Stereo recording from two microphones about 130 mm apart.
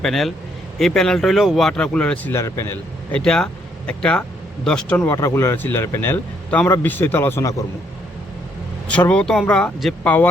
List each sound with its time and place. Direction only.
0.0 s speech: centre (ahead or behind); by 3.2 s 20° left (ahead or behind)
3.2 s a man's voice: 5° left (ahead or behind)
5.1 s a man's voice: 25° left (ahead or behind)
8.9 s a man's voice: 10° left (ahead or behind)